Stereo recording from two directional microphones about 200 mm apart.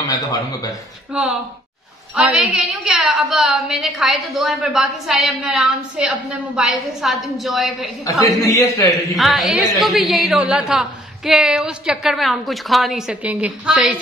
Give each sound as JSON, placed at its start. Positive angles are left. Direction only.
{"t": 0.1, "sound": "a man's voice", "side_deg": 15}
{"t": 2.1, "sound": "a woman's voice", "side_deg": -5}
{"t": 8.0, "sound": "a man's voice", "side_deg": 15}
{"t": 9.1, "sound": "a woman's voice", "side_deg": 0}